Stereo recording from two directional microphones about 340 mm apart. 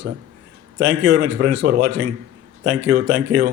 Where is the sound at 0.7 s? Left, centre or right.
Right.